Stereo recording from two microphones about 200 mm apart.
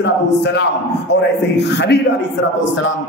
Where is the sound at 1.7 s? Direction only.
55° left (ahead or behind).